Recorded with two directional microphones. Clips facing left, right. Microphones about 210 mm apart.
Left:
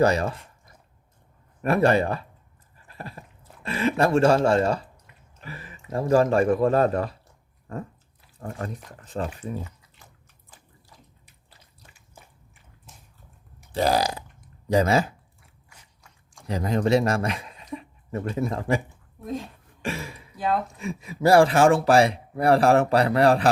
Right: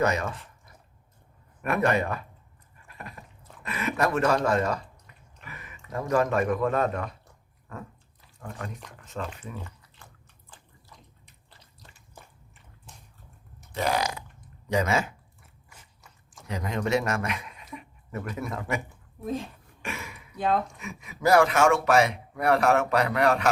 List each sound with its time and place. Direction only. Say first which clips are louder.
0.0 s speech: left 5 dB; 30° left (ahead or behind)
1.6 s speech: left 5 dB; 30° left (ahead or behind)
2.7 s a sound: left 4 dB; 30° left (ahead or behind)
4.4 s speech: left 4 dB; 30° left (ahead or behind)
8.4 s speech: left 5 dB; 40° left (ahead or behind)
10.5 s a sound: right 1 dB; 10° left (ahead or behind)
13.7 s speech: left 5 dB; 35° left (ahead or behind)
16.5 s speech: left 5 dB; 35° left (ahead or behind)
19.2 s speech: even; centre (ahead or behind)
19.8 s speech: left 6 dB; 30° left (ahead or behind)